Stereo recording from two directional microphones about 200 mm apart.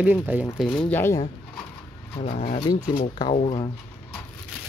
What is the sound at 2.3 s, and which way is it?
Speech, 40° left (ahead or behind).